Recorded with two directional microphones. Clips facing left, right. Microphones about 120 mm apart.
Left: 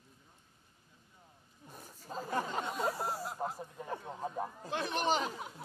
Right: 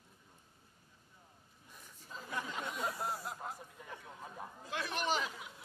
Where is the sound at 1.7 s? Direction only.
40° left (ahead or behind).